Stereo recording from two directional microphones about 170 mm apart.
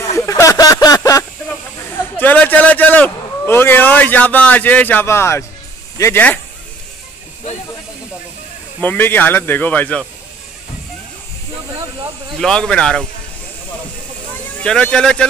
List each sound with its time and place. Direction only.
0.2 s a sound: 20° left (ahead or behind)
2.1 s a sound: 10° left (ahead or behind)
5.9 s speech: 15° left (ahead or behind)
8.8 s speech: 10° left (ahead or behind)
12.4 s speech: 5° left (ahead or behind)
14.6 s speech: 5° left (ahead or behind)